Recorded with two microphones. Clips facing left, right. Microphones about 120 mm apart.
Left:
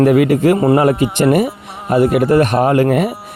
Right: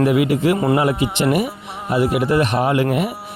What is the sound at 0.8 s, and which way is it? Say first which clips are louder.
Speech: left 5 dB; 50° left (ahead or behind).